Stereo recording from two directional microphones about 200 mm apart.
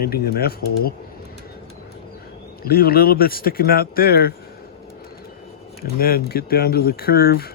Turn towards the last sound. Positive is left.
turn(degrees=50)  # may be behind; listen again after turning